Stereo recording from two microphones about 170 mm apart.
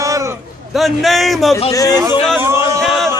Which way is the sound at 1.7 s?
20° left (ahead or behind).